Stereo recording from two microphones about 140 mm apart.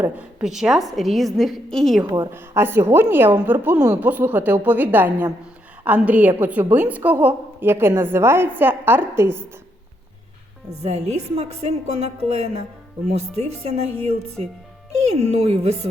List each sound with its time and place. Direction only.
0.0 s a woman's voice: 10° right (ahead or behind)
2.0 s a woman's voice: 30° right (ahead or behind)
2.3 s a woman's voice: 15° right (ahead or behind)
10.7 s a woman's voice: 50° right (ahead or behind)
15.2 s a woman's voice: 45° right (ahead or behind)